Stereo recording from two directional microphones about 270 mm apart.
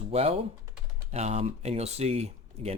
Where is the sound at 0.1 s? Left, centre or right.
Right.